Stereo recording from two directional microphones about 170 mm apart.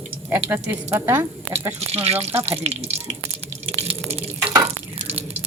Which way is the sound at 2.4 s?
35° right (ahead or behind).